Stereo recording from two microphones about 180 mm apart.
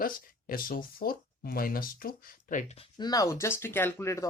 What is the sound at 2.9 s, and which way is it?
Speech, 20° left (ahead or behind).